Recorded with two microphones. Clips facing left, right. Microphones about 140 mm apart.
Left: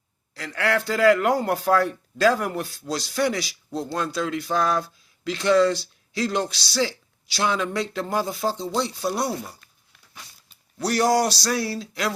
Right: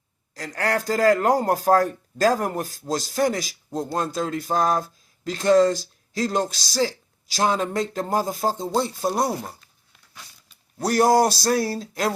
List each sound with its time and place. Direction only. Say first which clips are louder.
0.3 s a man's voice: even; 40° right (ahead or behind)
10.8 s speech: right 3 dB; 50° right (ahead or behind)